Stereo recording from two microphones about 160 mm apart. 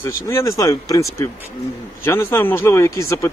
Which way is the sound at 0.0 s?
15° left (ahead or behind).